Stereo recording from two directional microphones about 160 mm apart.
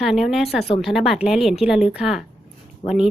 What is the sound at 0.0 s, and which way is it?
Speech, centre (ahead or behind).